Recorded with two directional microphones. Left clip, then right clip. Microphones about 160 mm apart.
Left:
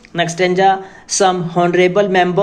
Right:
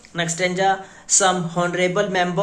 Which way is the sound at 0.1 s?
30° left (ahead or behind).